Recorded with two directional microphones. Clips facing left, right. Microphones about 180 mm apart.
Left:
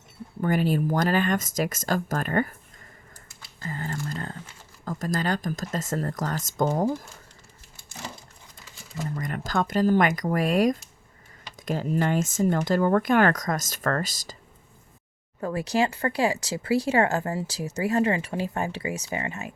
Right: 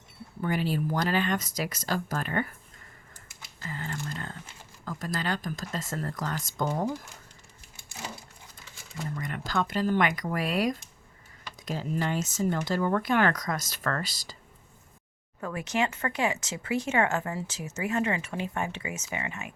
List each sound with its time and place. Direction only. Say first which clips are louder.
0.4 s speech: left 5 dB; 50° left (ahead or behind)
3.6 s a sound: left 4 dB; 40° left (ahead or behind)
4.9 s speech: left 5 dB; 40° left (ahead or behind)
9.1 s speech: left 3 dB; 45° left (ahead or behind)
15.4 s speech: left 5 dB; 35° left (ahead or behind)